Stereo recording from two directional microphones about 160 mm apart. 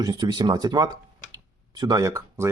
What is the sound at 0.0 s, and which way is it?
Speech, 25° right (ahead or behind).